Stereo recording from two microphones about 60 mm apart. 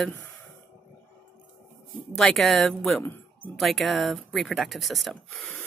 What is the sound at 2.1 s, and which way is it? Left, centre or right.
Speech, centre.